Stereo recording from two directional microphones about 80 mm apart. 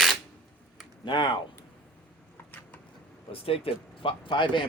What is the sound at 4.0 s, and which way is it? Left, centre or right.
Speech, left.